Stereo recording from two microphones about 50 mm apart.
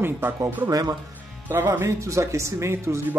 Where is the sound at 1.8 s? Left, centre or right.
Right.